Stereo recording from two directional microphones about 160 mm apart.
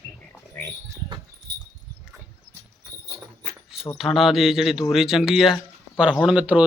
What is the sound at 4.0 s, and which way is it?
A man's voice, centre (ahead or behind).